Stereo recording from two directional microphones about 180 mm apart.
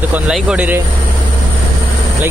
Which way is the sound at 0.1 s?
5° right (ahead or behind).